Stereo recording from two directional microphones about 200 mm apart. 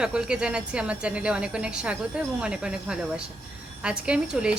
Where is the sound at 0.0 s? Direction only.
5° right (ahead or behind).